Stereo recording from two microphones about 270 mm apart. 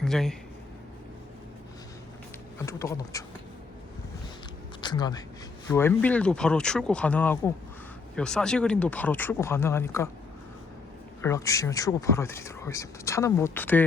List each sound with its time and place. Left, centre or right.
0.0 s a man's voice: centre
2.6 s speech: centre
4.8 s speech: centre
11.2 s speech: centre